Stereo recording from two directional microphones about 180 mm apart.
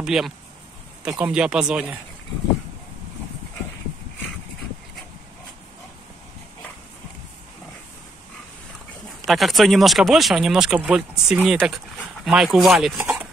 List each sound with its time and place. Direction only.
0.0 s speech: 5° right (ahead or behind)
9.2 s speech: centre (ahead or behind)
13.0 s a sound: 5° right (ahead or behind)